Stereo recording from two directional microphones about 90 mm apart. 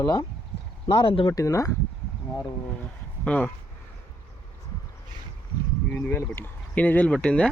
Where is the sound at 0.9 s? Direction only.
75° left (ahead or behind).